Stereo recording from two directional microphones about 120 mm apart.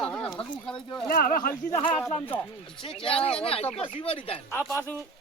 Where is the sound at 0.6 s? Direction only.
10° left (ahead or behind).